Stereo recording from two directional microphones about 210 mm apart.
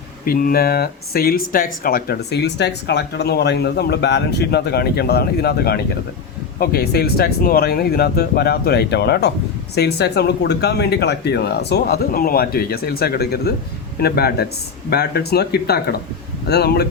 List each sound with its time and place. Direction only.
0.3 s speech: 45° left (ahead or behind)